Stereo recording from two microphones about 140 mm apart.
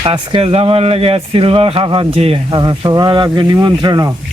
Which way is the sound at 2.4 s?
30° right (ahead or behind).